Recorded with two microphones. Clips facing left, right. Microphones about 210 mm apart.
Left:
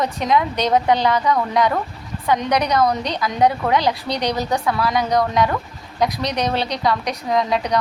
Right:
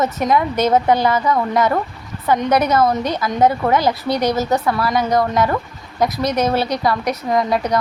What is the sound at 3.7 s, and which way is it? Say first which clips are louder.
Speech: right 2 dB; 45° right (ahead or behind).